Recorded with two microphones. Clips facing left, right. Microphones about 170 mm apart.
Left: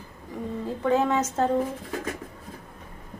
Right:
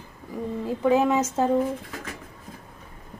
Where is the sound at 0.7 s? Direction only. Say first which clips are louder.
Right 3 dB; 15° right (ahead or behind).